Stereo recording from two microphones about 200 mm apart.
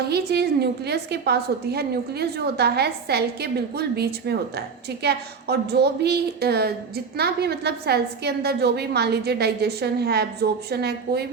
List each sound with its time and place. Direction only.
0.0 s a woman's voice: 55° right (ahead or behind)